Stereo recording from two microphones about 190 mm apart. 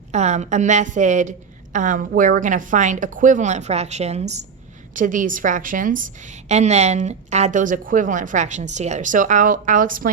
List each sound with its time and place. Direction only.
0.1 s a woman's voice: 35° right (ahead or behind)